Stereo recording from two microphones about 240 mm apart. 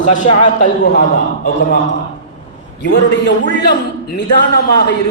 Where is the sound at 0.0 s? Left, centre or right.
Left.